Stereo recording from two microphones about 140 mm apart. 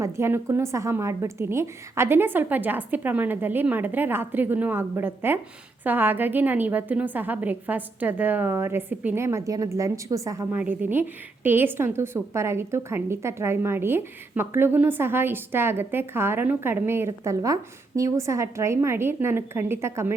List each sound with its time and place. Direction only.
0.0 s a woman's voice: 20° right (ahead or behind)
10.5 s a woman's voice: 10° right (ahead or behind)